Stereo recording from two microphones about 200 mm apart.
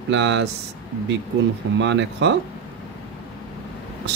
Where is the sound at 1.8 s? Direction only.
60° right (ahead or behind).